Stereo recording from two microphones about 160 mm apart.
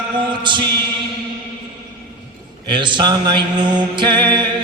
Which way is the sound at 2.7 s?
30° right (ahead or behind).